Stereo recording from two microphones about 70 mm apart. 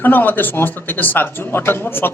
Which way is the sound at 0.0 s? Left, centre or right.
Left.